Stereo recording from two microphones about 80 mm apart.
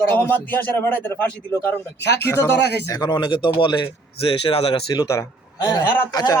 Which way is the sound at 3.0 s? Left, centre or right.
Left.